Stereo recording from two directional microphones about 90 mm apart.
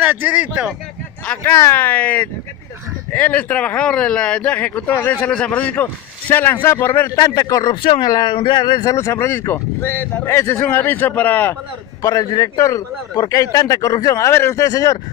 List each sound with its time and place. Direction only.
0.0 s speech: 20° right (ahead or behind)
1.4 s a man's voice: 30° left (ahead or behind)
1.8 s speech: 20° left (ahead or behind)
7.1 s a man's voice: 40° left (ahead or behind)
7.7 s speech: 65° left (ahead or behind)
8.9 s speech: 30° left (ahead or behind)
12.0 s a man's voice: 40° left (ahead or behind)